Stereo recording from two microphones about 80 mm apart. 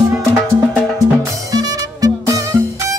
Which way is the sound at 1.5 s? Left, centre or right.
Right.